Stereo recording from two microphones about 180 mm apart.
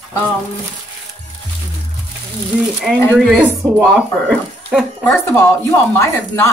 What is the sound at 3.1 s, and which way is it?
Speech, centre (ahead or behind).